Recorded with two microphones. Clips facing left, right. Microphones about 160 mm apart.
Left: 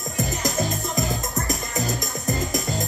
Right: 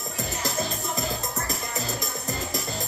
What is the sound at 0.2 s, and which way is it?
Music, 15° left (ahead or behind).